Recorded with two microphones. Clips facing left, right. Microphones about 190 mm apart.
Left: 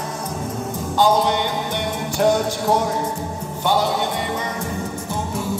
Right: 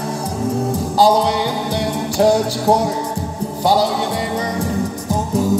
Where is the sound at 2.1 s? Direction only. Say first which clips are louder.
Right 4 dB; 35° right (ahead or behind).